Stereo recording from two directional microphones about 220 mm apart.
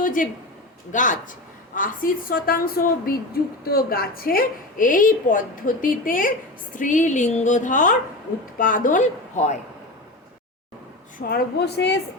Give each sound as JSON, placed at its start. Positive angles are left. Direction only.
{"t": 0.0, "sound": "a man's voice", "side_deg": 35}
{"t": 11.2, "sound": "a woman's voice", "side_deg": 45}